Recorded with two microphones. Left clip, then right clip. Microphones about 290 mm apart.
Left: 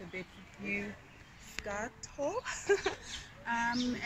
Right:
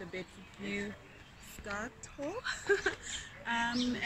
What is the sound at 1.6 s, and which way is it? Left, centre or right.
Speech, centre.